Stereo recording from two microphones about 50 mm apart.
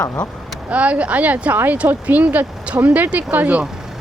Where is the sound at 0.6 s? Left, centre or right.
Right.